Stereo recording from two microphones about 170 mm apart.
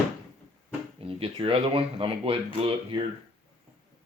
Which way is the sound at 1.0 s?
35° right (ahead or behind).